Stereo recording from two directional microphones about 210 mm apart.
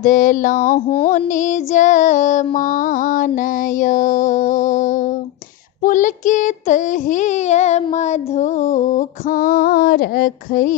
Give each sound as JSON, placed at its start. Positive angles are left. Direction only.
{"t": 0.0, "sound": "child singing", "side_deg": 40}